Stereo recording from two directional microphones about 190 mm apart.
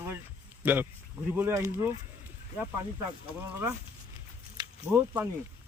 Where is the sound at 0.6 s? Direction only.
10° right (ahead or behind).